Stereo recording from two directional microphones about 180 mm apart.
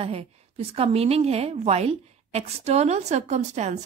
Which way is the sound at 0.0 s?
35° right (ahead or behind).